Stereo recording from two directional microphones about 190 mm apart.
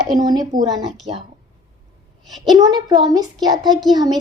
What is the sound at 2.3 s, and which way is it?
Speech, centre (ahead or behind).